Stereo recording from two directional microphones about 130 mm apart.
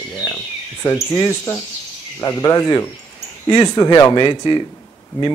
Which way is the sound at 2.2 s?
25° left (ahead or behind).